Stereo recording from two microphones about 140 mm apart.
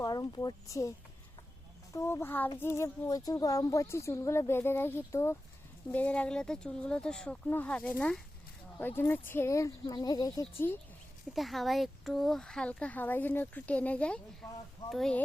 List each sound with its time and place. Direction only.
0.0 s speech: 25° left (ahead or behind)
11.3 s speech: centre (ahead or behind)
14.4 s speech: 25° left (ahead or behind)
14.8 s speech: 5° left (ahead or behind)